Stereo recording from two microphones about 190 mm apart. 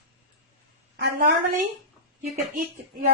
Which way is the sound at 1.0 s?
60° right (ahead or behind).